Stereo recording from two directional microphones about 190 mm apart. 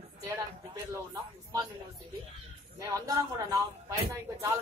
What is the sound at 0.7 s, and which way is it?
Speech, 20° right (ahead or behind).